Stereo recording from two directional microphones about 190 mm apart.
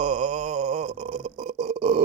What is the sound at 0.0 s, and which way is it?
Burping, 40° right (ahead or behind).